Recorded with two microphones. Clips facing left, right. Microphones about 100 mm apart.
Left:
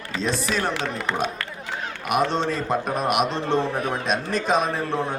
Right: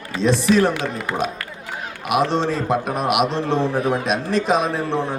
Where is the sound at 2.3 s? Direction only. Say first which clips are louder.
Right 3 dB; centre (ahead or behind).